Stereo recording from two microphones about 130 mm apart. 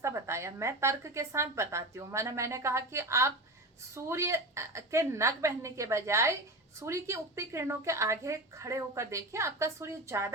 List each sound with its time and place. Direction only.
0.0 s speech: 20° right (ahead or behind)